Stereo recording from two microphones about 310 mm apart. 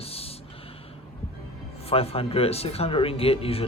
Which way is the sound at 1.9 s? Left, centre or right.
Centre.